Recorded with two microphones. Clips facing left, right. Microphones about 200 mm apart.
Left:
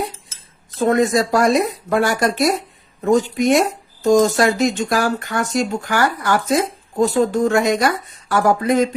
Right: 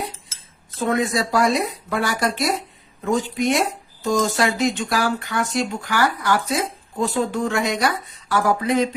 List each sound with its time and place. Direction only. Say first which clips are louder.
0.8 s speech: left 5 dB; 45° left (ahead or behind)